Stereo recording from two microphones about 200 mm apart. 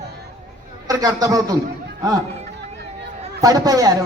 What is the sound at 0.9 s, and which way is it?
Speech, 20° right (ahead or behind).